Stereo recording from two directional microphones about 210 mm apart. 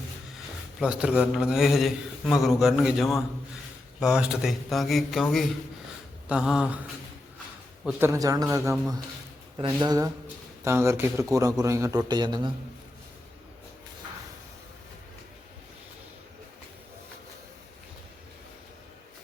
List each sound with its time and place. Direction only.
0.8 s a man's voice: 5° right (ahead or behind)
7.9 s a man's voice: 10° right (ahead or behind)